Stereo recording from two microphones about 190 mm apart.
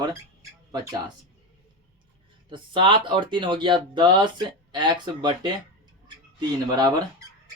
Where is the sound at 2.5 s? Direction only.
25° right (ahead or behind).